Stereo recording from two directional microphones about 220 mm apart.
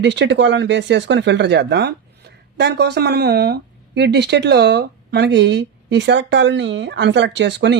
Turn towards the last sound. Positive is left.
turn(degrees=-50)  # may be behind; listen again after turning